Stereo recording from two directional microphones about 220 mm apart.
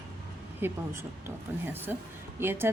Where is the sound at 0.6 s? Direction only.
10° right (ahead or behind).